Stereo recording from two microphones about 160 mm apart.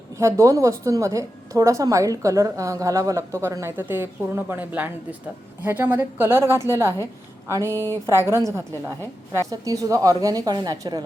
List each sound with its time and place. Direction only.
0.2 s a woman's voice: 20° right (ahead or behind)